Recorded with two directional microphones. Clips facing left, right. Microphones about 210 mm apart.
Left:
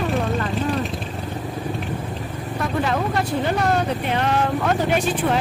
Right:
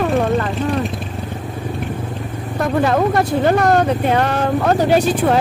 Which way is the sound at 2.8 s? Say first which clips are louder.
Right 8 dB; 50° right (ahead or behind).